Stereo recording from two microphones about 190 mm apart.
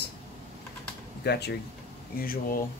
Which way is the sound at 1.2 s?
60° left (ahead or behind).